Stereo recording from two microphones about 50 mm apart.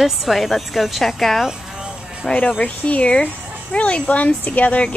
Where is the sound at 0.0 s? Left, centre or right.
Centre.